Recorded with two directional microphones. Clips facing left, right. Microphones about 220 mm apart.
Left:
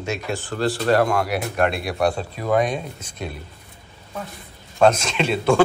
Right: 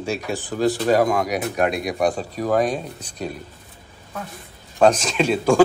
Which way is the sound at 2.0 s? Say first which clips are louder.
Even; 15° right (ahead or behind).